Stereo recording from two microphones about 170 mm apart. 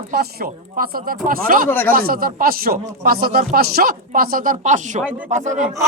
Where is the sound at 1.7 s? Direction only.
10° left (ahead or behind).